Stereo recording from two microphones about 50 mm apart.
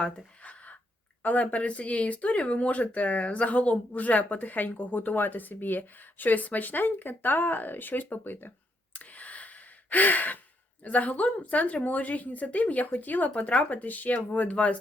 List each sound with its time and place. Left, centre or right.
0.4 s gasp: left
1.2 s speech: left
8.9 s gasp: left
10.8 s speech: left